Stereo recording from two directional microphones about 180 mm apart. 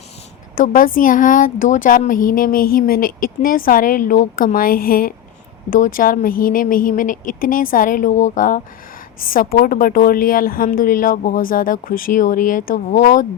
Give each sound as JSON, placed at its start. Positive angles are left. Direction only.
{"t": 0.5, "sound": "speech", "side_deg": 50}